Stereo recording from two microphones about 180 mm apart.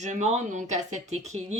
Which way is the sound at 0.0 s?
40° right (ahead or behind).